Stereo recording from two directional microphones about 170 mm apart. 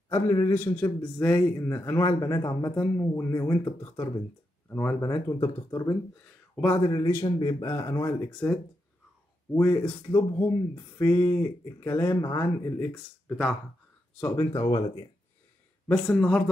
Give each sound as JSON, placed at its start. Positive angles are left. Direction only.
{"t": 0.1, "sound": "speech", "side_deg": 15}
{"t": 6.5, "sound": "speech", "side_deg": 10}
{"t": 6.8, "sound": "speech", "side_deg": 25}
{"t": 14.2, "sound": "speech", "side_deg": 15}
{"t": 16.2, "sound": "speech", "side_deg": 5}